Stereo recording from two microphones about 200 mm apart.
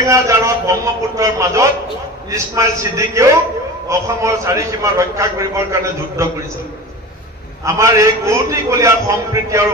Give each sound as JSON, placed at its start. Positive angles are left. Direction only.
{"t": 0.0, "sound": "a man's voice", "side_deg": -15}
{"t": 7.6, "sound": "a man's voice", "side_deg": -15}